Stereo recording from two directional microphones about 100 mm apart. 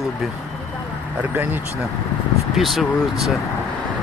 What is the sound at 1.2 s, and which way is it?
Speech, 20° right (ahead or behind).